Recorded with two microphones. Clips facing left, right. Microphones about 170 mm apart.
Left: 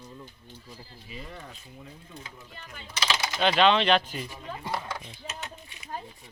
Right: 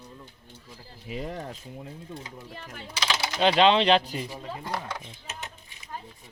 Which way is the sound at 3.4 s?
30° right (ahead or behind).